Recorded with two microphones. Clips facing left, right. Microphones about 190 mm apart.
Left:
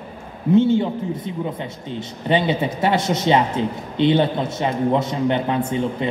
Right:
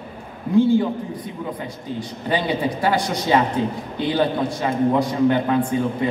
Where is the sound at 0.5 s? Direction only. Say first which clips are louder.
Even; 25° left (ahead or behind).